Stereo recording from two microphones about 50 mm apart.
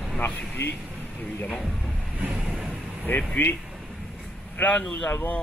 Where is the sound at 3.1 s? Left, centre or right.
Left.